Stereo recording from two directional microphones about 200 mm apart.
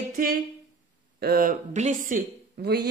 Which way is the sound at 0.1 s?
45° right (ahead or behind).